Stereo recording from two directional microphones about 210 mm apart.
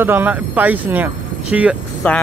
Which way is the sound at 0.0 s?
10° right (ahead or behind).